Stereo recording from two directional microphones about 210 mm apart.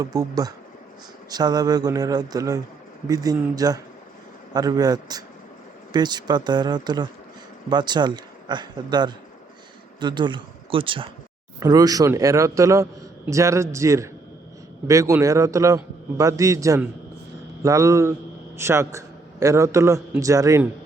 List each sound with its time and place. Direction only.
0.0 s a man's voice: 15° right (ahead or behind)